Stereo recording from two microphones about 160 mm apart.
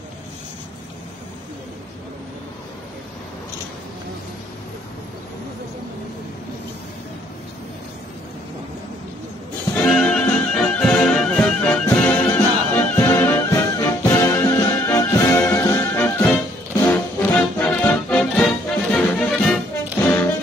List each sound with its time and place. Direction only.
9.8 s music: 5° left (ahead or behind)